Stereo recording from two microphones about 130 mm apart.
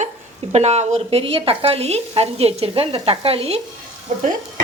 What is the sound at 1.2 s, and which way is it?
Speech, 45° right (ahead or behind).